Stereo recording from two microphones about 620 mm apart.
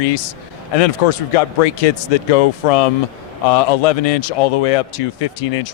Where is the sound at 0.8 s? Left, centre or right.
Left.